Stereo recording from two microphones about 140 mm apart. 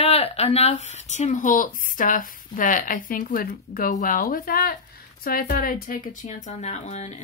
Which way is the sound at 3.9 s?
80° left.